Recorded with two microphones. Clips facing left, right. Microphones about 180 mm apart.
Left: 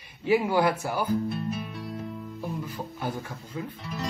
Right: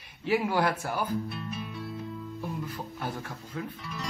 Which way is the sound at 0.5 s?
5° left (ahead or behind).